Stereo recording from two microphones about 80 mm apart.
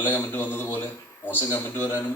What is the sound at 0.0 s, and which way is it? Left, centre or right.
A man's voice, left.